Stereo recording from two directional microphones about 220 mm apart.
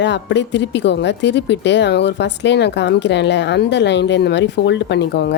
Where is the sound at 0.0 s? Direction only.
55° left (ahead or behind).